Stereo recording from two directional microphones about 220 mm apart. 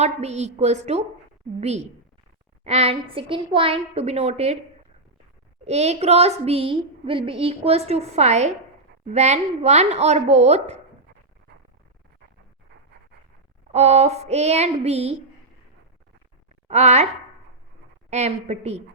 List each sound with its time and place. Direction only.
0.0 s a woman's voice: 30° right (ahead or behind)
5.6 s a woman's voice: 30° right (ahead or behind)
13.7 s a woman's voice: 30° right (ahead or behind)
16.6 s a woman's voice: 30° right (ahead or behind)
18.1 s a woman's voice: 30° right (ahead or behind)